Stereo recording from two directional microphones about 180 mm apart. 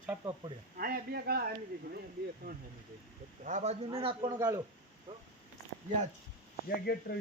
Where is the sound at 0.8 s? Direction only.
55° right (ahead or behind).